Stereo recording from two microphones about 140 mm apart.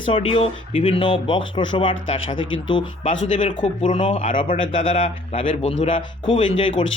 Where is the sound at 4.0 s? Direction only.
45° left (ahead or behind).